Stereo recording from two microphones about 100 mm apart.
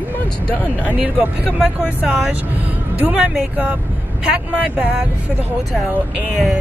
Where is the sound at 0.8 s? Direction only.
15° right (ahead or behind).